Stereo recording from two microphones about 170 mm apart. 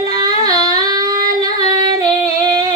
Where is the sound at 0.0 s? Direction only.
20° right (ahead or behind).